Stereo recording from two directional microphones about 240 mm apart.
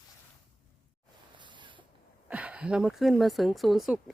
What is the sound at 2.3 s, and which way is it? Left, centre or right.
Speech, centre.